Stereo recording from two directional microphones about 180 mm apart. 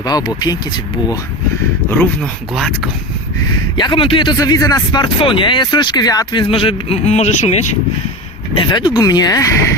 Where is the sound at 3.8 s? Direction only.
30° left (ahead or behind).